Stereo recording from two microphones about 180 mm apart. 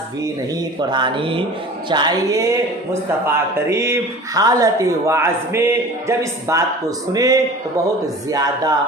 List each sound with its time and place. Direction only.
0.8 s mantra: 25° right (ahead or behind)
1.9 s a man's voice: 25° right (ahead or behind)
7.1 s mantra: 20° right (ahead or behind)